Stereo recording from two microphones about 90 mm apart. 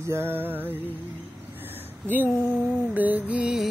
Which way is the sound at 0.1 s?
25° right (ahead or behind).